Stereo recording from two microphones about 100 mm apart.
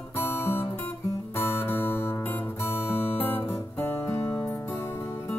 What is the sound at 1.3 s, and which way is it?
Music, 20° left (ahead or behind).